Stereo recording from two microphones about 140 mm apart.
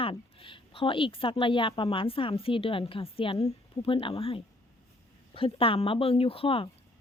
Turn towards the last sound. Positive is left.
turn(degrees=40)  # may be behind; listen again after turning